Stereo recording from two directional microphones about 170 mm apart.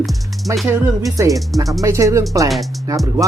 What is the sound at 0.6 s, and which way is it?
A man's voice, 15° right (ahead or behind).